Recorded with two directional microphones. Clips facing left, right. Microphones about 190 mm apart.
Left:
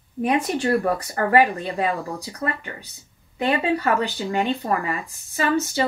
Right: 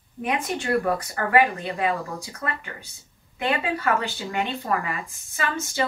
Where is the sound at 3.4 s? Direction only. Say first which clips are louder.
Left 4 dB; 35° left (ahead or behind).